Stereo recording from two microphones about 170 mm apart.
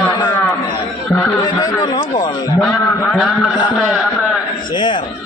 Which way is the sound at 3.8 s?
Centre (ahead or behind).